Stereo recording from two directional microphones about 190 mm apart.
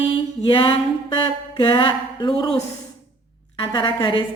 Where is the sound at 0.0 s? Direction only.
25° left (ahead or behind).